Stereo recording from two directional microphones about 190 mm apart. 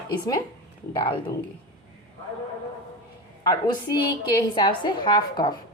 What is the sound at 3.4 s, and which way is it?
A woman's voice, 20° left (ahead or behind).